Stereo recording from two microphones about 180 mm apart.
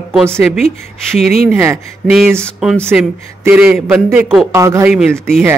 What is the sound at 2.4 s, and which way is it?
Speech, centre (ahead or behind).